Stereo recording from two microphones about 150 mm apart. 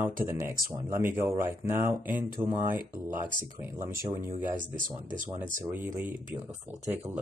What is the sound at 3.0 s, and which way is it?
Speech, 65° right (ahead or behind).